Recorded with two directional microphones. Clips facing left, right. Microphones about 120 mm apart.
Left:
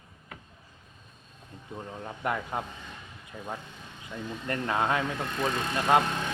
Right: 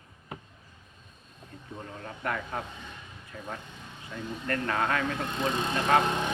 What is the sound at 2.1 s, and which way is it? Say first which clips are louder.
A man's voice: left 2 dB; 20° left (ahead or behind).